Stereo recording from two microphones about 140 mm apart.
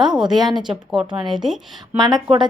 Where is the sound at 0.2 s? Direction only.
30° right (ahead or behind).